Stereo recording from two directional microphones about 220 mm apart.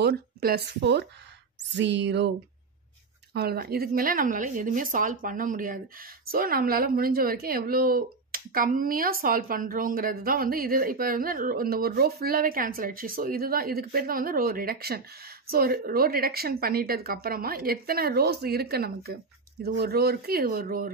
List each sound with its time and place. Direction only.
0.0 s speech: 45° right (ahead or behind)
3.3 s a woman's voice: 45° right (ahead or behind)